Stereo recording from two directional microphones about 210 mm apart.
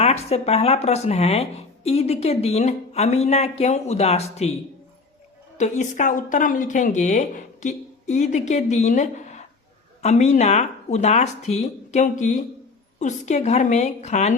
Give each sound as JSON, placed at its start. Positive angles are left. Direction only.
{"t": 0.0, "sound": "speech", "side_deg": 30}
{"t": 5.5, "sound": "speech", "side_deg": 35}